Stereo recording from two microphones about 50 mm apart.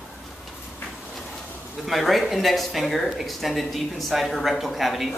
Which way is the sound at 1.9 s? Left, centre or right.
Centre.